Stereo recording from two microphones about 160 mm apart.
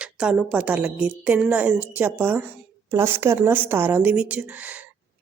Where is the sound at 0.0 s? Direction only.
5° right (ahead or behind).